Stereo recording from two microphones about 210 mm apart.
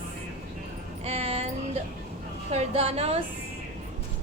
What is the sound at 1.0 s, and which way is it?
A woman's voice, 30° right (ahead or behind).